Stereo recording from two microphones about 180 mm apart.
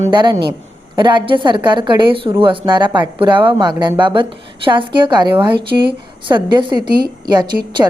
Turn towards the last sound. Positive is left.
turn(degrees=-25)  # may be behind; listen again after turning